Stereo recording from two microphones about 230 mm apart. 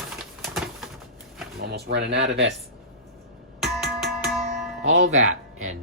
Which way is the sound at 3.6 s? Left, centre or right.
Centre.